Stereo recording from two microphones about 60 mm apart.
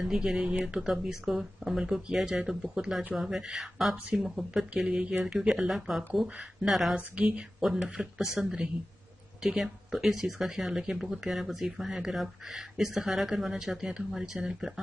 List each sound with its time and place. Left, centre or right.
0.0 s speech: centre
7.0 s a woman's voice: centre